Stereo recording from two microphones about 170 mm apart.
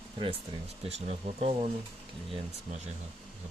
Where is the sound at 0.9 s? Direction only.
40° right (ahead or behind).